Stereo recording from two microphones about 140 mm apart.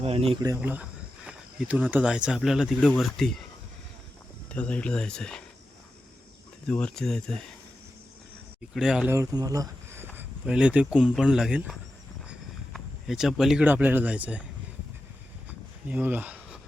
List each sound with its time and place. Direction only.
0.0 s speech: 45° right (ahead or behind)
0.5 s speech: 10° right (ahead or behind)
4.4 s speech: 10° left (ahead or behind)
6.7 s speech: 10° left (ahead or behind)
8.7 s speech: 5° right (ahead or behind)
9.0 s speech: 20° right (ahead or behind)
10.2 s speech: 5° right (ahead or behind)
15.4 s a sound: 10° right (ahead or behind)